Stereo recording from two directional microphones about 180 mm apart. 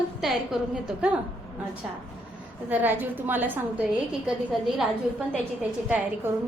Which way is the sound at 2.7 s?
10° right (ahead or behind).